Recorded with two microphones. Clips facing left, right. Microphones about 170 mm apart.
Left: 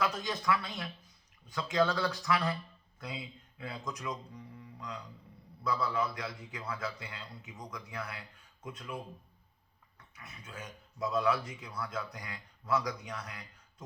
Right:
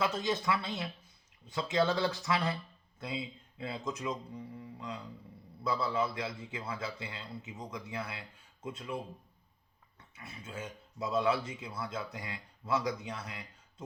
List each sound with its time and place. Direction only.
0.0 s a man's voice: 25° right (ahead or behind)
10.2 s a man's voice: 25° right (ahead or behind)